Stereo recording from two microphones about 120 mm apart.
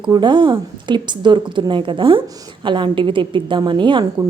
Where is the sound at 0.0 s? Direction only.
40° right (ahead or behind).